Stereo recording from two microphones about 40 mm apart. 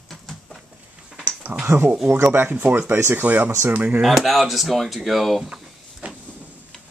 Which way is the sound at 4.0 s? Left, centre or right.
Centre.